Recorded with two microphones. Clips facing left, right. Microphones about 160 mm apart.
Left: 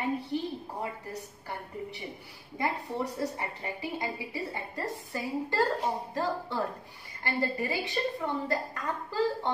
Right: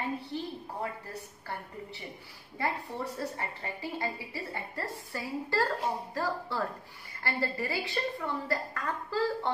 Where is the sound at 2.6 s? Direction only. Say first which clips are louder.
Left 2 dB; 15° left (ahead or behind).